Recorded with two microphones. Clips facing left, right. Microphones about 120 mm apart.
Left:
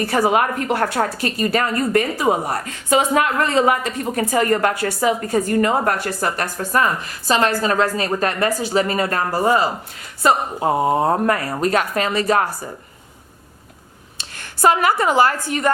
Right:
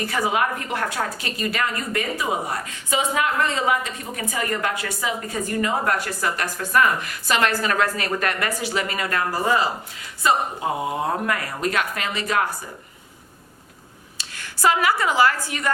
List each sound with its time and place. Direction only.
0.0 s a woman's voice: 40° left (ahead or behind)
14.2 s a sound: 50° left (ahead or behind)
15.0 s a woman's voice: 45° left (ahead or behind)